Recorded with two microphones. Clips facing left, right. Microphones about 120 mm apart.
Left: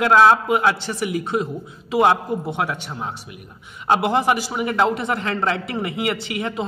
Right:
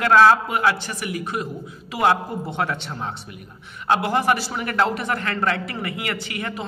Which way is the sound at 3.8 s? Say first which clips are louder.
Left 2 dB; 20° left (ahead or behind).